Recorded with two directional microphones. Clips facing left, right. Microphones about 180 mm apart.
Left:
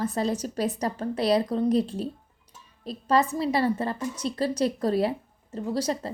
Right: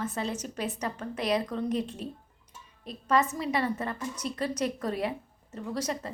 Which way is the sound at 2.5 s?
30° left (ahead or behind).